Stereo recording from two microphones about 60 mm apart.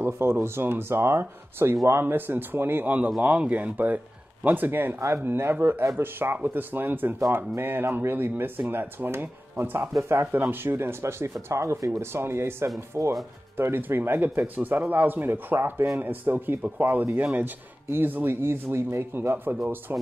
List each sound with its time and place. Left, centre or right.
0.0 s speech: right
9.9 s speech: right
19.3 s speech: right